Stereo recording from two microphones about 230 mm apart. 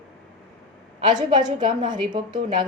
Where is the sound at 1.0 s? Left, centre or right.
Centre.